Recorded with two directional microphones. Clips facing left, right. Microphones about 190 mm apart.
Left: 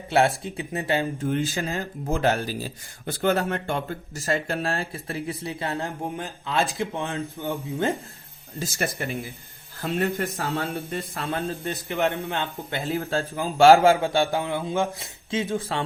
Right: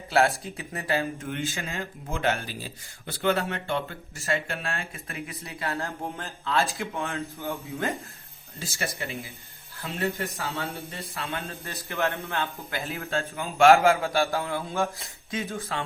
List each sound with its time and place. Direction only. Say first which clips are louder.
0.1 s a man's voice: left 2 dB; 20° left (ahead or behind)
1.3 s a man's voice: left 6 dB; 35° left (ahead or behind); by 7.5 s 15° left (ahead or behind)
7.5 s a man's voice: left 6 dB; 30° left (ahead or behind)
9.8 s speech: left 5 dB; 50° left (ahead or behind)
11.1 s speech: left 5 dB; 35° left (ahead or behind)
11.6 s a man's voice: left 2 dB; 20° left (ahead or behind)
12.9 s speech: left 6 dB; 35° left (ahead or behind)
14.0 s a man's voice: left 3 dB; 20° left (ahead or behind)